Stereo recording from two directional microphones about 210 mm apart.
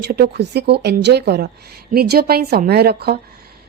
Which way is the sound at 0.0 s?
50° right (ahead or behind).